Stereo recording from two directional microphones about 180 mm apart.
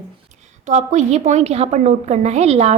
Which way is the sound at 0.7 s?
40° right (ahead or behind).